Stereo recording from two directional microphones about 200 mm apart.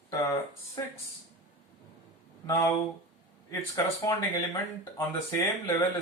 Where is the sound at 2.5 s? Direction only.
15° left (ahead or behind).